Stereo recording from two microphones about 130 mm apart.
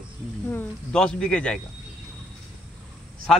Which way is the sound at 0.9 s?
5° left (ahead or behind).